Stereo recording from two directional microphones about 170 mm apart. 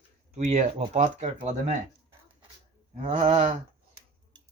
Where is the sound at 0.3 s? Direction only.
45° right (ahead or behind).